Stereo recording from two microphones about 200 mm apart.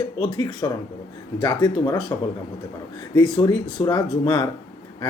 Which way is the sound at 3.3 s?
20° left (ahead or behind).